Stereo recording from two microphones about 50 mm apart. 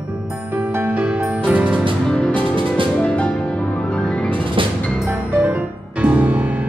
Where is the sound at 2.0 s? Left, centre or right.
Centre.